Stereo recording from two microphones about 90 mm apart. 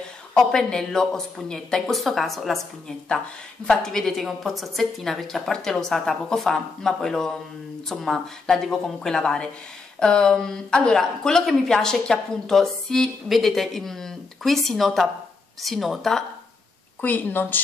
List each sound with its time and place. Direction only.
0.3 s a woman's voice: 5° left (ahead or behind)
3.6 s a woman's voice: 5° left (ahead or behind)
17.0 s speech: 20° left (ahead or behind)